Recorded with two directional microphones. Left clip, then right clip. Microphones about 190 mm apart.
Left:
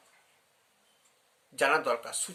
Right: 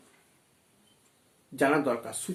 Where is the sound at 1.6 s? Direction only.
45° left (ahead or behind).